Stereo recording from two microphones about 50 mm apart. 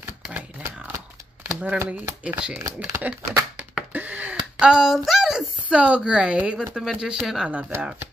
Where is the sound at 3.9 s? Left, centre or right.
Right.